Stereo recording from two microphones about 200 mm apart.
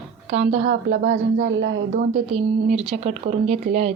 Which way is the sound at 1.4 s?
55° right (ahead or behind).